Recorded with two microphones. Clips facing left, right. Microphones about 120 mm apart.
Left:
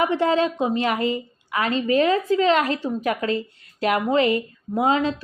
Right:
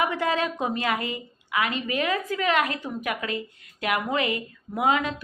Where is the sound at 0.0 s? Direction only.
30° left (ahead or behind).